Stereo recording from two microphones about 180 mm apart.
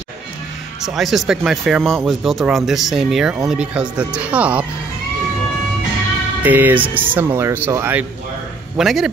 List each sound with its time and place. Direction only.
0.8 s speech: centre (ahead or behind)
6.4 s speech: 10° right (ahead or behind)